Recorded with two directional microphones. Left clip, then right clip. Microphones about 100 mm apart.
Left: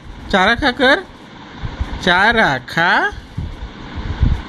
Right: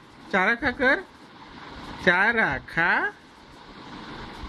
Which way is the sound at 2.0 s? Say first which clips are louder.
Left 8 dB; 30° left (ahead or behind).